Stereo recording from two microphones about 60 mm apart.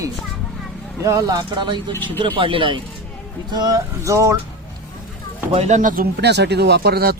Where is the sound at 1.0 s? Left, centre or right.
Right.